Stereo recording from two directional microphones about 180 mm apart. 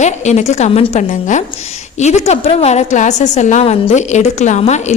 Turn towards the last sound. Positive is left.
turn(degrees=40)  # may be behind; listen again after turning